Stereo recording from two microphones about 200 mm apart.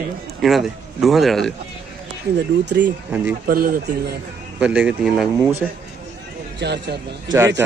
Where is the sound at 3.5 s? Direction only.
45° right (ahead or behind).